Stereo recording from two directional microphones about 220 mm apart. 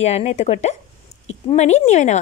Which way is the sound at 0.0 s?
30° left (ahead or behind).